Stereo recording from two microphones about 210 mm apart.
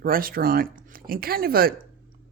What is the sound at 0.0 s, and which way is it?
Speech, 45° right (ahead or behind).